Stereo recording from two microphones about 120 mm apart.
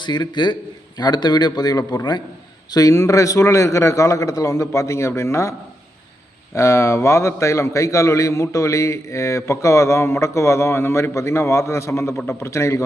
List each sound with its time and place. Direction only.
0.0 s a man's voice: 40° left (ahead or behind)